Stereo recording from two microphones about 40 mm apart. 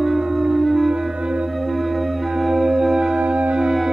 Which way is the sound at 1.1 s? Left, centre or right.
Right.